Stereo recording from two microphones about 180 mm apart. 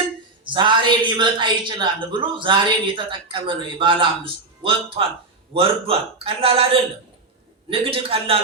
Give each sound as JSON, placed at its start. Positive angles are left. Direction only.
{"t": 0.4, "sound": "a woman's voice", "side_deg": -25}
{"t": 7.7, "sound": "a man's voice", "side_deg": -30}